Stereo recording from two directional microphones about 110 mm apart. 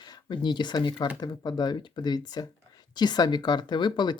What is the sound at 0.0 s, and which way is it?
Speech, 40° left (ahead or behind).